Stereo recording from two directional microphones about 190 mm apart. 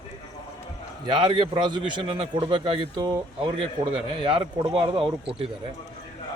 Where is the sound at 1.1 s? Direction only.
25° right (ahead or behind).